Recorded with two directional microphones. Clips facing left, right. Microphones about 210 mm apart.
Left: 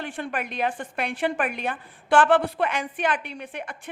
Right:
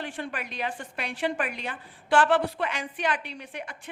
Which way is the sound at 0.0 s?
55° left (ahead or behind).